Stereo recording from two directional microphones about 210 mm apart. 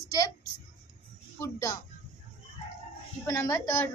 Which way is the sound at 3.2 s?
15° left (ahead or behind).